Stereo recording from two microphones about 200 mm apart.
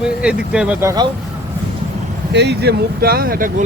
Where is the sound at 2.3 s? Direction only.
60° right (ahead or behind).